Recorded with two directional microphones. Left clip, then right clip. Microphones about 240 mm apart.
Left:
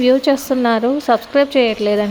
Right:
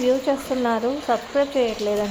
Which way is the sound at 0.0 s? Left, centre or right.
Left.